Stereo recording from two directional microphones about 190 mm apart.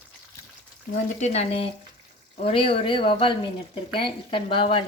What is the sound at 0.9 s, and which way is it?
Speech, 35° left (ahead or behind).